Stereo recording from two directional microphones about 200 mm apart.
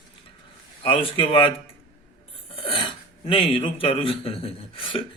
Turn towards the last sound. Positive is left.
turn(degrees=25)  # may be behind; listen again after turning